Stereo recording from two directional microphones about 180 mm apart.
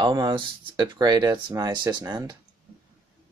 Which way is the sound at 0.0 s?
25° right (ahead or behind).